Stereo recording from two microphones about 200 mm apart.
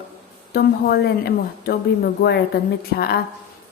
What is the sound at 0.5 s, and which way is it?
A woman's voice, 50° left (ahead or behind).